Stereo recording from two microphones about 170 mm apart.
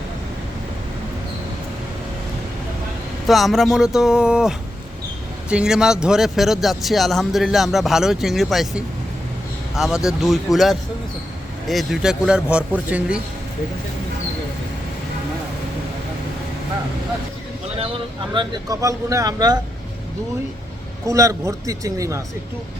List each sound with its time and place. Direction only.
3.2 s speech: centre (ahead or behind)
17.7 s speech: 30° right (ahead or behind)
21.1 s speech: 20° right (ahead or behind)